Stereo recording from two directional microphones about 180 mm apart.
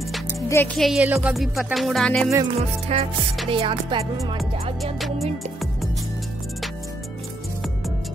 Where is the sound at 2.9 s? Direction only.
35° right (ahead or behind).